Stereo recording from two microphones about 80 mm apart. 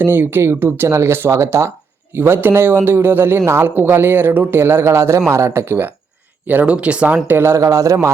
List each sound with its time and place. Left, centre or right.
0.0 s a man's voice: right
7.6 s speech: right